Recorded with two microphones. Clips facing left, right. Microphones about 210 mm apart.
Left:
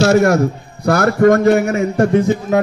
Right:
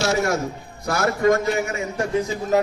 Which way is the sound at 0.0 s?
55° left (ahead or behind).